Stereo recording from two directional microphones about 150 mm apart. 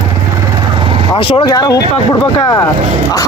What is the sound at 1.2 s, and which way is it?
Speech, 30° left (ahead or behind).